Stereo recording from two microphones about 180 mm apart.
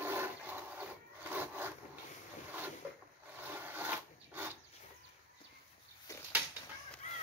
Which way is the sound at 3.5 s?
10° right (ahead or behind).